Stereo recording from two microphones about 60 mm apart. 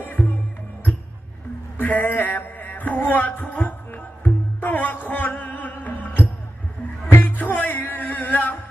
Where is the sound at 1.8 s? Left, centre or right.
Left.